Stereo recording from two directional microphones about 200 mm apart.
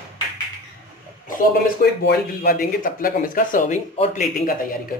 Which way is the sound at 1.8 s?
50° left (ahead or behind).